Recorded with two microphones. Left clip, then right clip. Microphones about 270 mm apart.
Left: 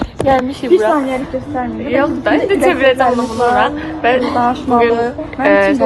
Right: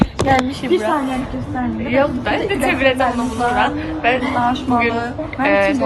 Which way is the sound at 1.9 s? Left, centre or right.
Centre.